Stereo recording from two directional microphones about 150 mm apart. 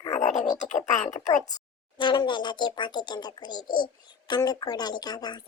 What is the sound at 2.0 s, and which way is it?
A child's voice, 30° left (ahead or behind).